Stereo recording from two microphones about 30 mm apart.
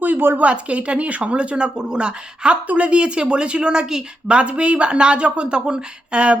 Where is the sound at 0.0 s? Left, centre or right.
Right.